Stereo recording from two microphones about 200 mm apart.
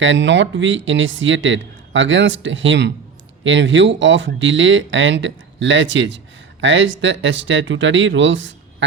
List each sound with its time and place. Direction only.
0.0 s speech: 65° right (ahead or behind)